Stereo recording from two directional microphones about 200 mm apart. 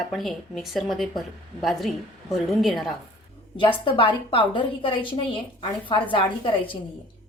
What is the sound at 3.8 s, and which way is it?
A woman's voice, 25° left (ahead or behind).